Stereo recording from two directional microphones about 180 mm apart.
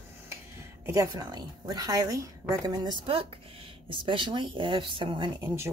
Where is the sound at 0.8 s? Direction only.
20° right (ahead or behind).